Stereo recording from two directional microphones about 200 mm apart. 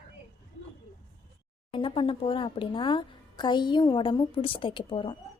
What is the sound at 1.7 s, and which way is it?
A woman's voice, 25° left (ahead or behind).